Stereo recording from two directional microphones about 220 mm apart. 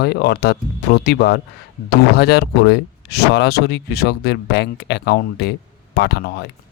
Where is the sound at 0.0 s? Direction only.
45° left (ahead or behind).